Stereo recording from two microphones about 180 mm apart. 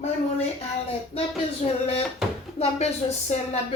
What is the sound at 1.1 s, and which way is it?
Speech, 35° left (ahead or behind).